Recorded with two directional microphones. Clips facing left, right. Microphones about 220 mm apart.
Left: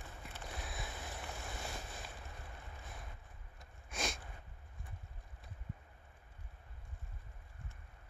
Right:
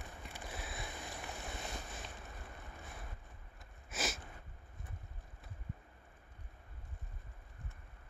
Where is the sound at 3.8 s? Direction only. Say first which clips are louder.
Right 1 dB; 5° right (ahead or behind).